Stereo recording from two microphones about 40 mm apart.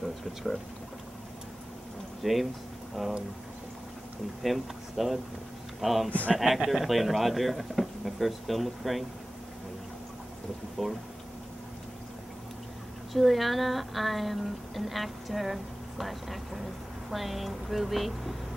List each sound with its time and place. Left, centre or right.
0.2 s speech: centre
2.2 s speech: centre
4.4 s speech: centre
6.0 s speech: left
6.3 s speech: centre
10.8 s speech: centre
13.1 s speech: centre